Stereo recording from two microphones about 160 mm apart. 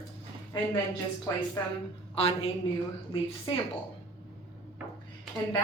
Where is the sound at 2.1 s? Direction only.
40° left (ahead or behind).